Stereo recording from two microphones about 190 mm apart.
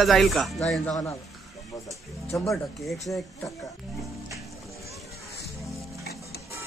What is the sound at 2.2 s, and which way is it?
Music, 15° left (ahead or behind).